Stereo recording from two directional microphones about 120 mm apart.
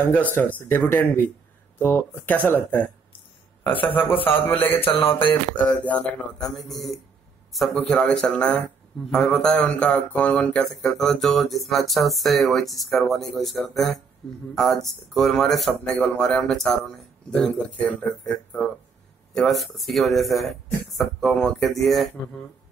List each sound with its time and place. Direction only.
0.0 s speech: 15° left (ahead or behind)
3.6 s a man's voice: 45° left (ahead or behind)
3.9 s speech: 15° left (ahead or behind)
4.8 s a sound: 50° left (ahead or behind)
5.6 s speech: 10° left (ahead or behind)